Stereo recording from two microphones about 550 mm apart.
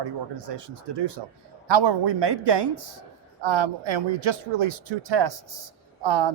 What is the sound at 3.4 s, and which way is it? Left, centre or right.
Speech, right.